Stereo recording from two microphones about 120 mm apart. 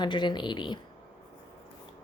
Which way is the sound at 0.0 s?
40° left (ahead or behind).